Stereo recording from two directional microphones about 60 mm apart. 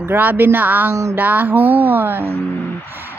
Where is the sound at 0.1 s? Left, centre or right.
Right.